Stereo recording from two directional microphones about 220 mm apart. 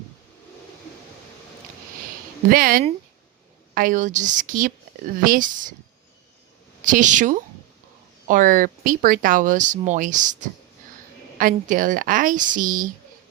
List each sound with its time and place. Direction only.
2.5 s speech: 40° right (ahead or behind)
6.8 s speech: 35° right (ahead or behind)